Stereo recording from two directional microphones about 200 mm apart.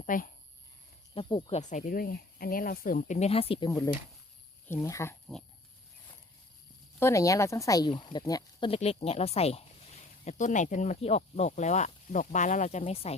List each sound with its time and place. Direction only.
0.0 s speech: 40° left (ahead or behind)
1.1 s speech: 25° left (ahead or behind)
3.7 s speech: 15° left (ahead or behind)
7.0 s speech: 15° left (ahead or behind)